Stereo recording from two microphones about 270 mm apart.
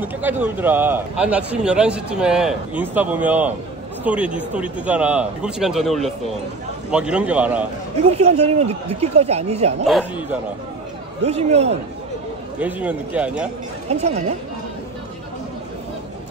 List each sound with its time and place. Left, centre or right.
0.0 s a man's voice: centre
8.1 s speech: right
9.8 s a man's voice: centre
11.2 s speech: right
12.5 s a man's voice: centre
13.8 s speech: right